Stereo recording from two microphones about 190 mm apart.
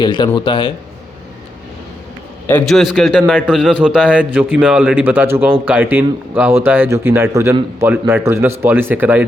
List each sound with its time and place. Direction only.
0.0 s speech: 25° left (ahead or behind)
2.5 s a man's voice: 5° left (ahead or behind); by 9.2 s 10° right (ahead or behind)